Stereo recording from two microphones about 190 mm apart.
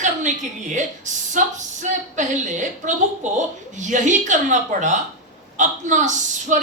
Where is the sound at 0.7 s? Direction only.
40° right (ahead or behind).